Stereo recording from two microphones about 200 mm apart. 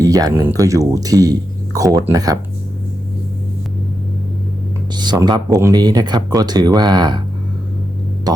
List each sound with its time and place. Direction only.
0.0 s speech: 20° right (ahead or behind)
4.9 s speech: 20° right (ahead or behind)